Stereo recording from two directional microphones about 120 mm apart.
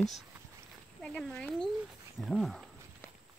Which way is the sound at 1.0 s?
5° left (ahead or behind).